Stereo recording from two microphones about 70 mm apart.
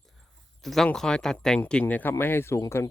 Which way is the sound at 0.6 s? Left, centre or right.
Centre.